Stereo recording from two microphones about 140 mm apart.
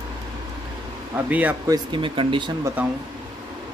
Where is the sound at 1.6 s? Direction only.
30° right (ahead or behind).